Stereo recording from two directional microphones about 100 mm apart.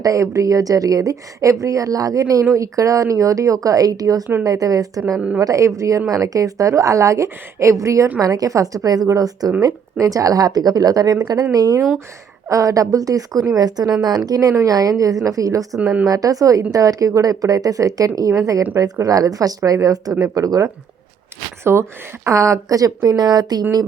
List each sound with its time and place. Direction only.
0.0 s a woman's voice: 35° right (ahead or behind)
15.7 s speech: 10° right (ahead or behind)
16.0 s a woman's voice: 35° right (ahead or behind)